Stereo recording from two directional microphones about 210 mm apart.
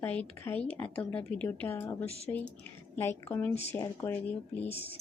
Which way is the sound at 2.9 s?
10° left (ahead or behind).